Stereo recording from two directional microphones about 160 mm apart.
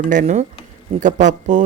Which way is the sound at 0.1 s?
50° right (ahead or behind).